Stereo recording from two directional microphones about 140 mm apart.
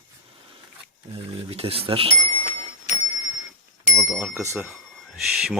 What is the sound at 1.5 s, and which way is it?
Speech, 45° right (ahead or behind).